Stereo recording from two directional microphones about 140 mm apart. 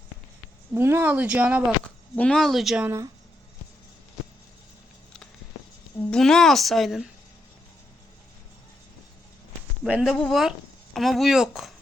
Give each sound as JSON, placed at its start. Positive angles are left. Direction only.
{"t": 0.7, "sound": "speech", "side_deg": -15}
{"t": 2.1, "sound": "speech", "side_deg": 5}
{"t": 2.8, "sound": "speech", "side_deg": -20}
{"t": 6.1, "sound": "speech", "side_deg": 5}
{"t": 9.8, "sound": "speech", "side_deg": -5}